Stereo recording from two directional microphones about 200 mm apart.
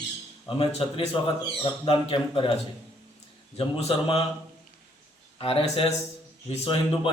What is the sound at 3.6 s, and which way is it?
Speech, 30° left (ahead or behind).